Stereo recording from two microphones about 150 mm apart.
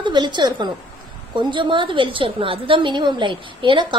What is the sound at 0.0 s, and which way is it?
A woman's voice, 30° right (ahead or behind).